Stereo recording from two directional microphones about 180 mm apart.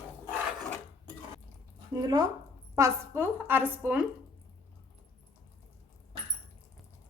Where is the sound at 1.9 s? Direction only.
20° right (ahead or behind).